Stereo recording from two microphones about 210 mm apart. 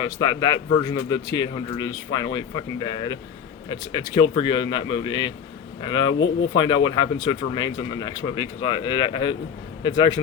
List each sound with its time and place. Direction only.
0.0 s a man's voice: 20° left (ahead or behind)
6.1 s speech: 65° left (ahead or behind)
6.6 s a man's voice: 20° left (ahead or behind)